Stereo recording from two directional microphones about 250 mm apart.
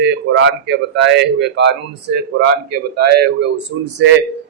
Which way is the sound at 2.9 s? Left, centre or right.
Right.